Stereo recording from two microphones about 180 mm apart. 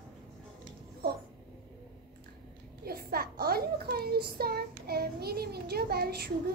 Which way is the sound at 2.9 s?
55° right (ahead or behind).